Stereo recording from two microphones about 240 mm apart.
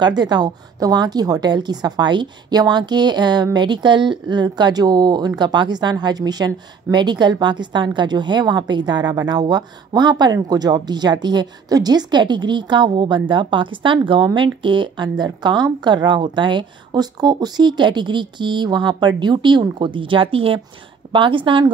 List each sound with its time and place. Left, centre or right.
0.0 s a woman's voice: centre